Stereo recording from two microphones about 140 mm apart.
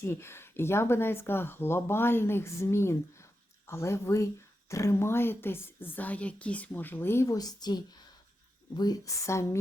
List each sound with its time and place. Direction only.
0.0 s a woman's voice: 15° left (ahead or behind)